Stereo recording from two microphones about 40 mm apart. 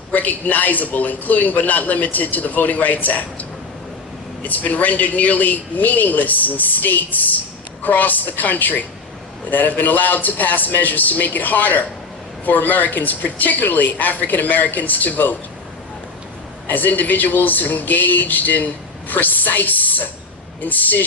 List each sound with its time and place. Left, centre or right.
0.1 s speech: left
4.4 s speech: left
16.6 s speech: left